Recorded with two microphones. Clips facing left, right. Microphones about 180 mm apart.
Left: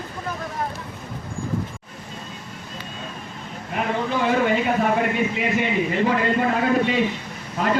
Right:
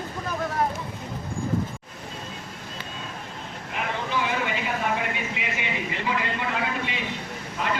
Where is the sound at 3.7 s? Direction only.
45° left (ahead or behind).